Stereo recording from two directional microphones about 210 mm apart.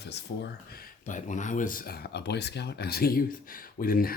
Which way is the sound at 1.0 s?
35° left (ahead or behind).